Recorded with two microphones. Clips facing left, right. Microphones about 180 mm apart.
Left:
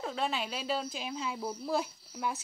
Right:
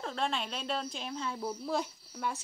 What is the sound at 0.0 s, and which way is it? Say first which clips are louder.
A woman's voice: left 1 dB; 5° left (ahead or behind).